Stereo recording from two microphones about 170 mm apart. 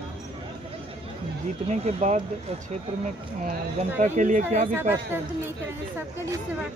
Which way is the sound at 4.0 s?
50° right (ahead or behind).